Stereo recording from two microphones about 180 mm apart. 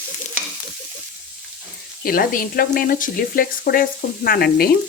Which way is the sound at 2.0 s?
55° left (ahead or behind).